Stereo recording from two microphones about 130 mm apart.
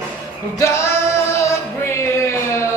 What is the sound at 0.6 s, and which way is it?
Music, 20° left (ahead or behind).